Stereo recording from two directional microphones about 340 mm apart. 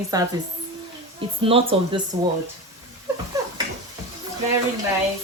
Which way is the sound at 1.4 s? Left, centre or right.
Centre.